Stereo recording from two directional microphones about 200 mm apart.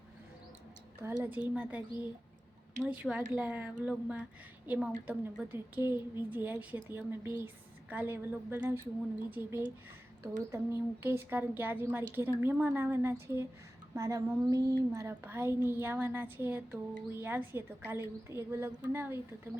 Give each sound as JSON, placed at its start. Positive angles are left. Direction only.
{"t": 1.0, "sound": "a woman's voice", "side_deg": -10}
{"t": 2.8, "sound": "a woman's voice", "side_deg": -5}
{"t": 14.6, "sound": "a woman's voice", "side_deg": 15}
{"t": 14.9, "sound": "a woman's voice", "side_deg": -10}